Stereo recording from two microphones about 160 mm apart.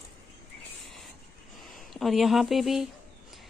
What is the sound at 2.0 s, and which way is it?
Speech, centre (ahead or behind).